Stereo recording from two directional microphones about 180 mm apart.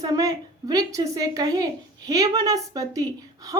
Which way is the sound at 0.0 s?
20° right (ahead or behind).